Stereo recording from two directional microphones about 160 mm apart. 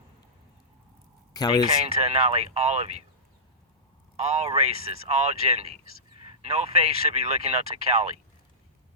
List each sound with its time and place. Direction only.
1.3 s a man's voice: 25° left (ahead or behind)
2.0 s speech: 40° right (ahead or behind)
4.2 s speech: 40° right (ahead or behind)